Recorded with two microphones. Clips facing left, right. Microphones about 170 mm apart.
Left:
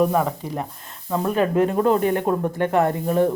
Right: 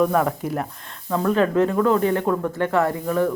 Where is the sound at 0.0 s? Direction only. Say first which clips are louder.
Even; 15° left (ahead or behind).